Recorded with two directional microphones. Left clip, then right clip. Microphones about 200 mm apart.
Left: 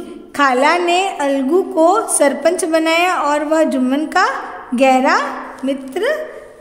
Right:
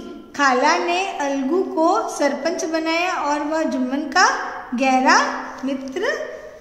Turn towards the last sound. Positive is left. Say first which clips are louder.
# left 5 dB
turn(degrees=40)  # may be behind; listen again after turning